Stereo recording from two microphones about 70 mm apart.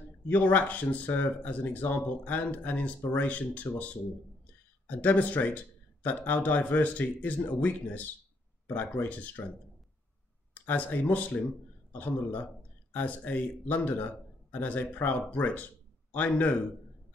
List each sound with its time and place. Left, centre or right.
0.3 s speech: left
10.6 s speech: left